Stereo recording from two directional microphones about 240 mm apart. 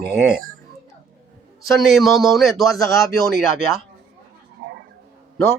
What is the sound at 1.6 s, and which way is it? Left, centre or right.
Speech, centre.